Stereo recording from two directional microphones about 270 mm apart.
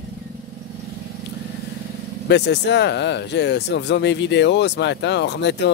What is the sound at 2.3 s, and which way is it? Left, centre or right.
Speech, left.